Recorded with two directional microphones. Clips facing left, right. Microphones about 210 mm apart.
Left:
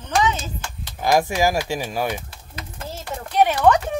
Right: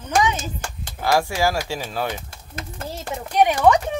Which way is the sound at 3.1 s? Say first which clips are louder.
Even; 10° right (ahead or behind).